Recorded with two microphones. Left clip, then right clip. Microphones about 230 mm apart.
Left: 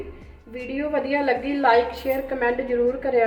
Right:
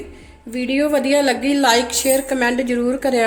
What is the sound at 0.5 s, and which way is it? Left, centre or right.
A woman's voice, right.